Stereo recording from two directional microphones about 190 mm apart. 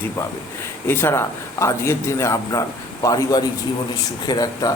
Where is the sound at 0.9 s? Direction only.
15° left (ahead or behind).